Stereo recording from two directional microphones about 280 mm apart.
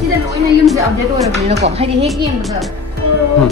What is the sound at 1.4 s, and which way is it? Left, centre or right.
Speech, right.